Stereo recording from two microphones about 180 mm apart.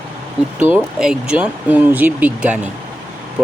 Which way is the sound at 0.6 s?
5° right (ahead or behind).